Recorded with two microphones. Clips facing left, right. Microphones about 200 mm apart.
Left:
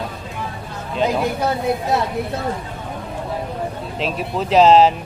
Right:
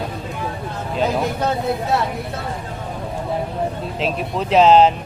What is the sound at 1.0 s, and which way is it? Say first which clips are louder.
Speech: left 1 dB; 10° left (ahead or behind).